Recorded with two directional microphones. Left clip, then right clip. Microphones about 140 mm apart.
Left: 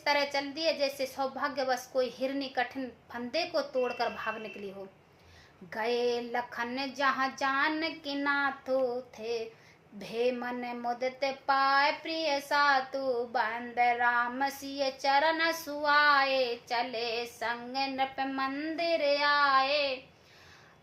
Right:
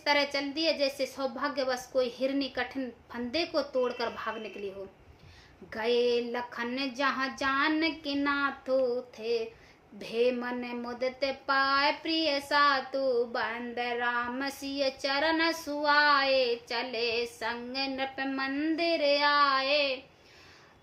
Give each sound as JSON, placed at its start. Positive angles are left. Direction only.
{"t": 0.0, "sound": "speech", "side_deg": -20}
{"t": 5.7, "sound": "speech", "side_deg": -20}